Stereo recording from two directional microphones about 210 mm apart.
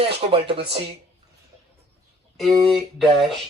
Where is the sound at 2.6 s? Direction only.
Centre (ahead or behind).